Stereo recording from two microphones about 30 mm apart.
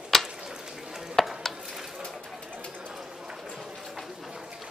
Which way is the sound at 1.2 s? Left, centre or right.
Centre.